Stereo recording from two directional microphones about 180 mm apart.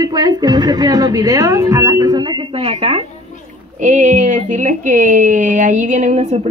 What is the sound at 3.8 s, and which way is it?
A woman's voice, 40° right (ahead or behind).